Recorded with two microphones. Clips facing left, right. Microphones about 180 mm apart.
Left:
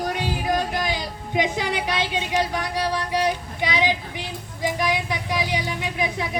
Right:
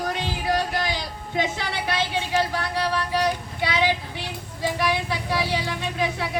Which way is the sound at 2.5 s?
15° left (ahead or behind).